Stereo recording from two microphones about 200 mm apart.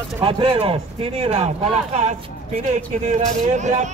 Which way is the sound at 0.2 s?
25° right (ahead or behind).